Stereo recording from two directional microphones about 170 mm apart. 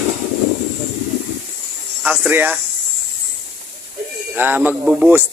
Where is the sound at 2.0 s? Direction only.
10° right (ahead or behind).